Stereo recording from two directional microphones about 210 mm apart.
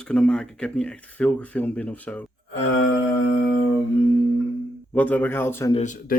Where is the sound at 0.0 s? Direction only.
5° left (ahead or behind).